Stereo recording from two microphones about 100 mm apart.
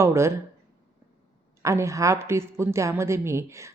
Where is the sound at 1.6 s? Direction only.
30° right (ahead or behind).